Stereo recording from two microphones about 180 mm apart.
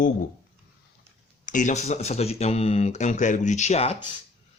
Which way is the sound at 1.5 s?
45° left (ahead or behind).